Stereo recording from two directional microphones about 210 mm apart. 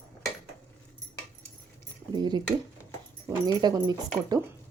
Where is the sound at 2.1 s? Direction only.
20° right (ahead or behind).